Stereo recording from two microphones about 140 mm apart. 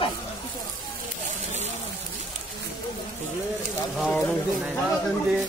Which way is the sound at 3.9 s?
Centre (ahead or behind).